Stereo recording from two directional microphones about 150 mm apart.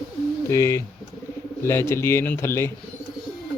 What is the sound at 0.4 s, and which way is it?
A man's voice, 20° left (ahead or behind).